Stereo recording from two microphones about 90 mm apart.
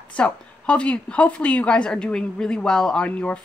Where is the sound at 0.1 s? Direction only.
10° left (ahead or behind).